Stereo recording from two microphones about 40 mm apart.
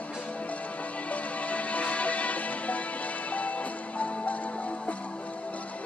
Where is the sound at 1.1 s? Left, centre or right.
Left.